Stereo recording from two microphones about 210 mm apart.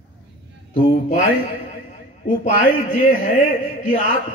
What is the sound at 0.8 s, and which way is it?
Speech, 35° left (ahead or behind).